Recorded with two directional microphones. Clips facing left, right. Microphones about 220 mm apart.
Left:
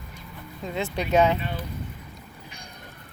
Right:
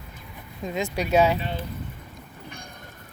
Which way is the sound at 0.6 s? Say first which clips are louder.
Right 1 dB; 15° right (ahead or behind).